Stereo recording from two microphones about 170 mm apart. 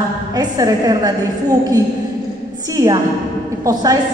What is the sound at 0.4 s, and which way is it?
Speech, 20° right (ahead or behind).